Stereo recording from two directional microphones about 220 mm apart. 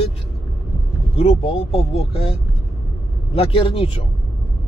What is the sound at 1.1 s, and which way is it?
Speech, 25° left (ahead or behind).